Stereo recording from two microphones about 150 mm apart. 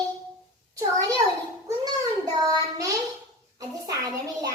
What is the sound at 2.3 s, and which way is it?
Child singing, 25° right (ahead or behind).